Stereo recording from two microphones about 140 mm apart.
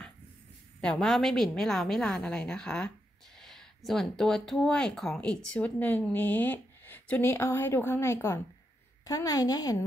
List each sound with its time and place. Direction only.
0.7 s a woman's voice: 5° left (ahead or behind); by 9.8 s 25° left (ahead or behind)